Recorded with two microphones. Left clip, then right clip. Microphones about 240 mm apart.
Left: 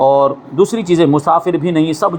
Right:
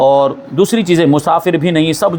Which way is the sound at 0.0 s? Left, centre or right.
Right.